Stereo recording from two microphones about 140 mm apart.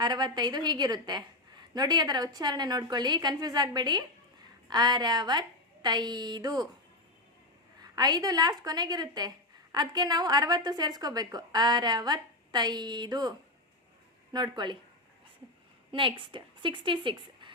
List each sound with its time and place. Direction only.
0.0 s a woman's voice: 30° right (ahead or behind)
7.8 s a woman's voice: 30° right (ahead or behind)
14.3 s a woman's voice: 30° right (ahead or behind)
15.9 s a woman's voice: 35° right (ahead or behind)